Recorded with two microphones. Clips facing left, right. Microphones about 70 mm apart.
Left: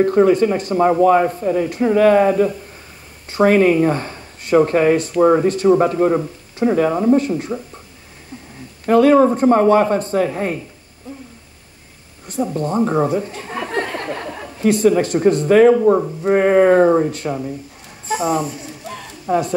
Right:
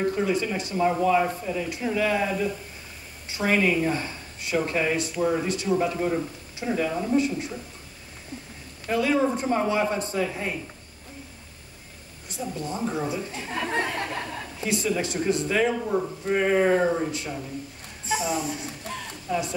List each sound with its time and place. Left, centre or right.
0.0 s speech: left
5.4 s speech: left
8.8 s speech: left
12.3 s speech: left
14.2 s chuckle: centre
14.6 s speech: left